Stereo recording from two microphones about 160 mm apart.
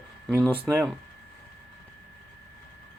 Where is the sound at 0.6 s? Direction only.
15° right (ahead or behind).